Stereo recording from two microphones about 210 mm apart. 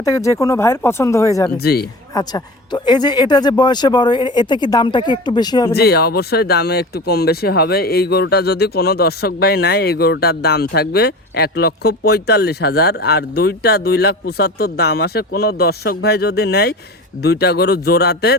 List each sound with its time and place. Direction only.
0.0 s speech: 15° left (ahead or behind)
1.5 s speech: 50° left (ahead or behind)
2.1 s speech: 20° left (ahead or behind)
5.7 s speech: 50° left (ahead or behind)